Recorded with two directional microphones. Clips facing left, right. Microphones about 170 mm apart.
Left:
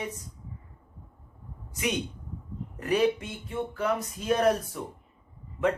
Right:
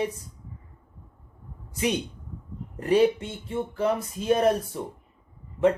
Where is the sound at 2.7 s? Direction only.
30° right (ahead or behind).